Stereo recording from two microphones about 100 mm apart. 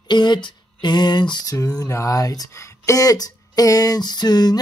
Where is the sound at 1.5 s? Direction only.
35° left (ahead or behind).